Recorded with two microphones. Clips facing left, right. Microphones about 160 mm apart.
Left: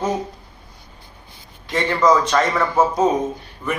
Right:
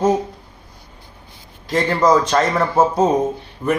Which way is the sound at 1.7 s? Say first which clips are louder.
Right 2 dB; 40° right (ahead or behind).